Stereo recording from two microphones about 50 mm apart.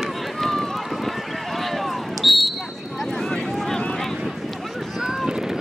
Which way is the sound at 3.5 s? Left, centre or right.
Centre.